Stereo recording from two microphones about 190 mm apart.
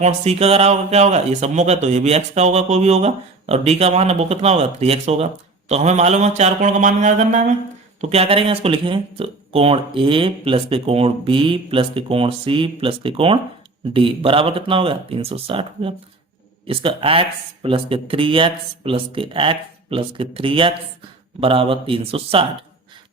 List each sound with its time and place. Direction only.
0.0 s speech: 35° right (ahead or behind)